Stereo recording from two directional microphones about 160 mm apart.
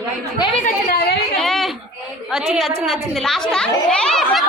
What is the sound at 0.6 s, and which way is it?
Speech, 70° left (ahead or behind).